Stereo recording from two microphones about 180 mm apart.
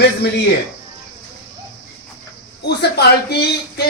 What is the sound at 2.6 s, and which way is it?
A man's voice, 65° left (ahead or behind).